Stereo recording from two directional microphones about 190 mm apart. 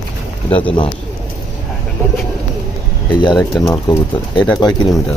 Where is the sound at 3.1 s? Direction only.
20° left (ahead or behind).